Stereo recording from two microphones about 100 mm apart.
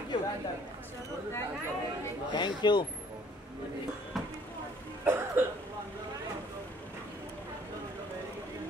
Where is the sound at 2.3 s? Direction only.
50° left (ahead or behind).